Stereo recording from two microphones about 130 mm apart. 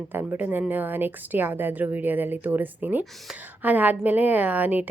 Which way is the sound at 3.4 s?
15° right (ahead or behind).